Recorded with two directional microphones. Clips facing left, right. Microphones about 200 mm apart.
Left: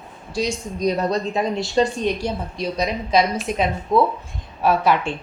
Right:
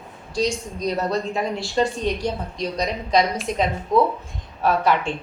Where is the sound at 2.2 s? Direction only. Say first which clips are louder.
Left 1 dB; 5° left (ahead or behind).